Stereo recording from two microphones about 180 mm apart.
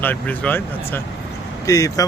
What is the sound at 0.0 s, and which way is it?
A man's voice, 10° left (ahead or behind).